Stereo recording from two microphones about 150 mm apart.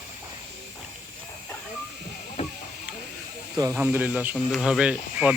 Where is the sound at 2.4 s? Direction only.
40° left (ahead or behind).